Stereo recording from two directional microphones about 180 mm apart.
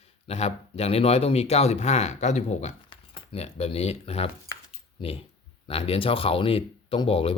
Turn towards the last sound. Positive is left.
turn(degrees=30)  # may be behind; listen again after turning